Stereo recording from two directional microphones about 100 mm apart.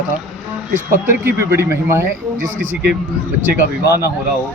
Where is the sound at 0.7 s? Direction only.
25° right (ahead or behind).